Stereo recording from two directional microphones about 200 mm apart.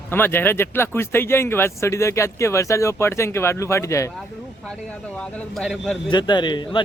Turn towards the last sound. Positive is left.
turn(degrees=20)  # may be behind; listen again after turning